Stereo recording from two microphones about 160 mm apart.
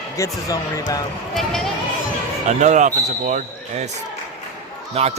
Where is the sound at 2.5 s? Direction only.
50° right (ahead or behind).